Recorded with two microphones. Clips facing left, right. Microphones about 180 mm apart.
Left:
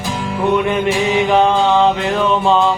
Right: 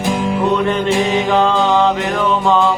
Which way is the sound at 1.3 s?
15° left (ahead or behind).